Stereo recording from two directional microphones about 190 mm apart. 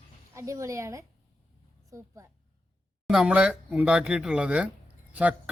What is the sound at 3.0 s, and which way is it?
Speech, 5° right (ahead or behind).